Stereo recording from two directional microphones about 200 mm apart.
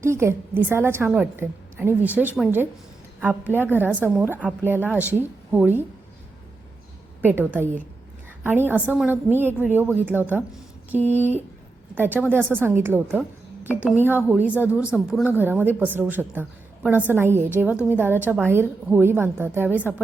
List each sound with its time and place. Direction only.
0.0 s a woman's voice: 15° right (ahead or behind)
7.2 s a woman's voice: 10° right (ahead or behind)